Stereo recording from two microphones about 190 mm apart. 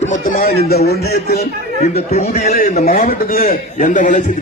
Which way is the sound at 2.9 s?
50° left (ahead or behind).